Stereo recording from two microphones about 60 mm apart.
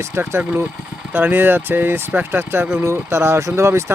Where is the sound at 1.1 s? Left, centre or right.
Right.